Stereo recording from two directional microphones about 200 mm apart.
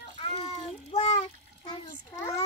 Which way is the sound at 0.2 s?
30° left (ahead or behind).